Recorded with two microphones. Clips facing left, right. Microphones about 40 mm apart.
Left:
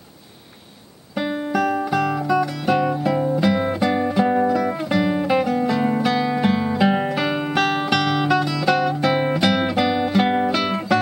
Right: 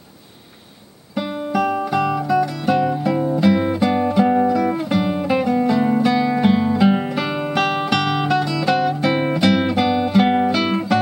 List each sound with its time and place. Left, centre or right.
1.1 s music: centre
1.6 s music: centre